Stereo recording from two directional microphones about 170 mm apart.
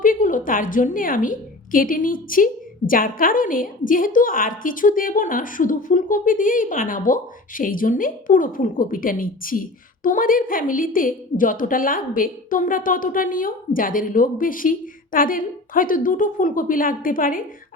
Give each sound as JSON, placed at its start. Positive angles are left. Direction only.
{"t": 0.0, "sound": "a woman's voice", "side_deg": 50}